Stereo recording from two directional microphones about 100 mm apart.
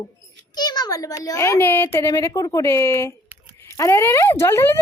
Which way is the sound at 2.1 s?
35° left (ahead or behind).